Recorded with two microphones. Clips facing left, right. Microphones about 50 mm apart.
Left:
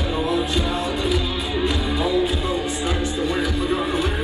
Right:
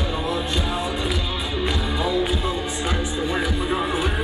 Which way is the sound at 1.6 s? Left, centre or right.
Centre.